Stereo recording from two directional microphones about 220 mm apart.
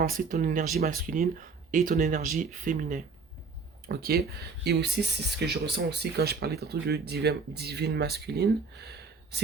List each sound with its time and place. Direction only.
0.0 s speech: 40° right (ahead or behind)